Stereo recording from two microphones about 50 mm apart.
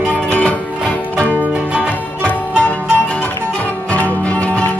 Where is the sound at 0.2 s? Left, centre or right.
Left.